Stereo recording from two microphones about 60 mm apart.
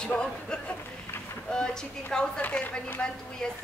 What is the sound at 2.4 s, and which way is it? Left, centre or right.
Speech, left.